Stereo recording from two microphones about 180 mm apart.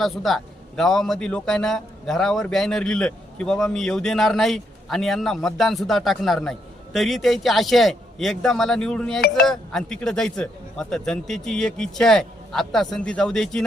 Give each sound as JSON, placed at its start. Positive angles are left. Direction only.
{"t": 0.0, "sound": "a man's voice", "side_deg": 0}